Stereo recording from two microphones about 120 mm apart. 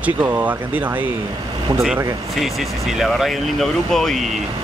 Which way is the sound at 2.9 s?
Centre (ahead or behind).